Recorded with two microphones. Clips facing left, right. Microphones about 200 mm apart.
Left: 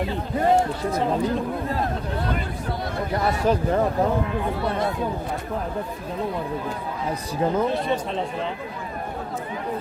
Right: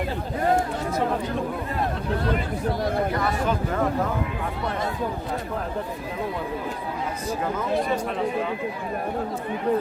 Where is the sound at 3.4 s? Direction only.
35° left (ahead or behind).